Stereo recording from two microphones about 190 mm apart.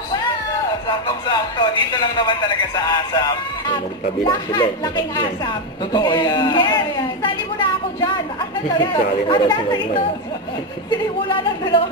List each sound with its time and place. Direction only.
0.8 s speech: 20° left (ahead or behind)